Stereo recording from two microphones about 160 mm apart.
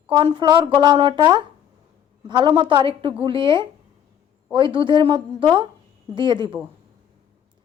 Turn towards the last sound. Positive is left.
turn(degrees=-30)  # may be behind; listen again after turning